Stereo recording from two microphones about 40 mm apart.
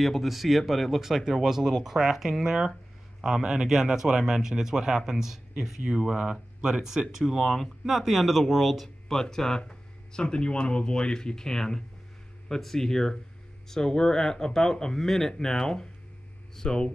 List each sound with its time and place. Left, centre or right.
0.0 s speech: centre
8.8 s speech: centre